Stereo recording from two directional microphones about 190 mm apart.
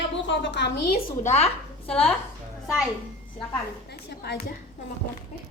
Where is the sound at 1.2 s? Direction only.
35° left (ahead or behind).